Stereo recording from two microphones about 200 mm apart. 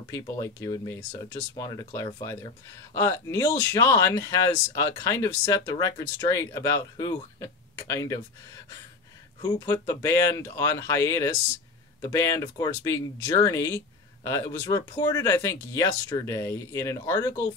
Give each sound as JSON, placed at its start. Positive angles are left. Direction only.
{"t": 0.1, "sound": "speech", "side_deg": 15}
{"t": 9.4, "sound": "speech", "side_deg": 20}